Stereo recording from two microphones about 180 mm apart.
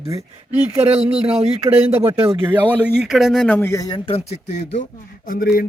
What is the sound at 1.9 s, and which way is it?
Speech, 10° right (ahead or behind).